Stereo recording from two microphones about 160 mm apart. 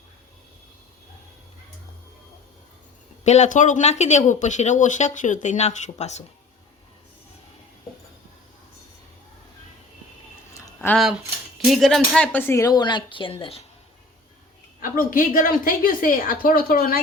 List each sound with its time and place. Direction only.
3.2 s speech: 45° left (ahead or behind)
10.5 s a sound: 15° left (ahead or behind)
11.6 s speech: centre (ahead or behind); by 13.6 s 35° left (ahead or behind)
14.8 s a woman's voice: 60° left (ahead or behind)